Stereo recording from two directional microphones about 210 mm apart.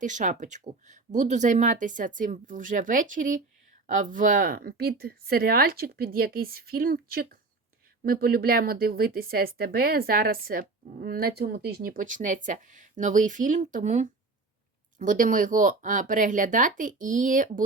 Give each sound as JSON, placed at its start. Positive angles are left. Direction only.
{"t": 0.0, "sound": "speech", "side_deg": -35}